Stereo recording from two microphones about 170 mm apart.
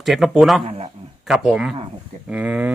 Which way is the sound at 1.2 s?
Centre (ahead or behind).